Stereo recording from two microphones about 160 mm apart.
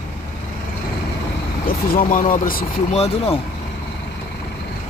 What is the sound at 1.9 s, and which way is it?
Speech, 55° left (ahead or behind).